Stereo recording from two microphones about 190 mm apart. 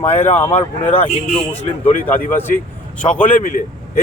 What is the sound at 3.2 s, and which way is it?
Speech, 45° left (ahead or behind).